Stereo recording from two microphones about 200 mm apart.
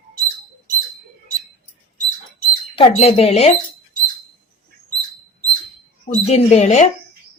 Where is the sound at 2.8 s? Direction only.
30° left (ahead or behind).